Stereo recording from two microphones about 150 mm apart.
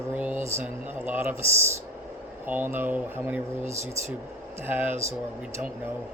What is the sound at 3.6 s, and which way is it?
Speech, 50° right (ahead or behind).